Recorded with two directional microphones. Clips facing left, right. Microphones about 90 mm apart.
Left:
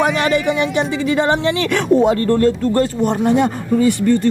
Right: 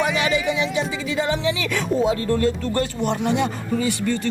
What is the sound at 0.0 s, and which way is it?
Speech, 50° left (ahead or behind).